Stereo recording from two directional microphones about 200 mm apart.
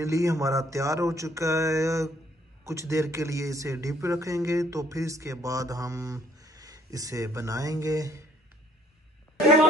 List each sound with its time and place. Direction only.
0.0 s speech: 15° right (ahead or behind)